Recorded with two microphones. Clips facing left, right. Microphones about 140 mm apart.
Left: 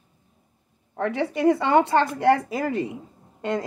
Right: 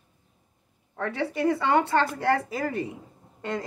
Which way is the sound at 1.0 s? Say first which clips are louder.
Left 4 dB; 15° left (ahead or behind).